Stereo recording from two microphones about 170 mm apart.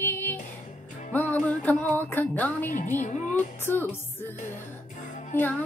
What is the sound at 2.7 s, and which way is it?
Music, 50° left (ahead or behind).